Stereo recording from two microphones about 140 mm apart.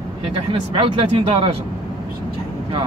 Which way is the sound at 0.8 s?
40° right (ahead or behind).